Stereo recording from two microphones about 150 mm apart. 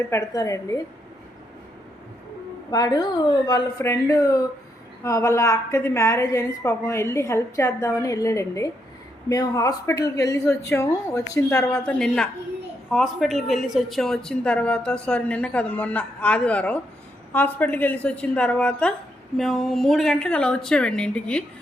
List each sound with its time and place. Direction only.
0.1 s a woman's voice: 20° left (ahead or behind)
2.6 s a woman's voice: 25° left (ahead or behind)
11.7 s a woman's voice: 5° left (ahead or behind)